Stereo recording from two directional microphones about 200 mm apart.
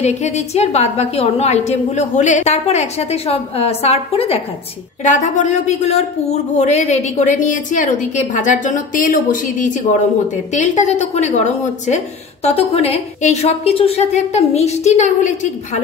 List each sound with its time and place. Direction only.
0.0 s speech: 35° left (ahead or behind)